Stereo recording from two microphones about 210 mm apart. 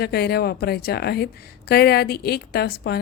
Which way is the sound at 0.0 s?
50° left (ahead or behind).